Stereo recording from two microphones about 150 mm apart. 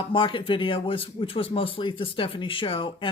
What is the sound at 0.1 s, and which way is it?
Speech, 35° left (ahead or behind).